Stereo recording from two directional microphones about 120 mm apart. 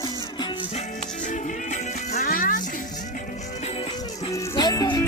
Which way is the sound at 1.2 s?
90° left.